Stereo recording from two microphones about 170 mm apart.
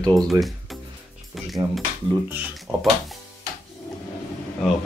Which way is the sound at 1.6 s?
30° right (ahead or behind).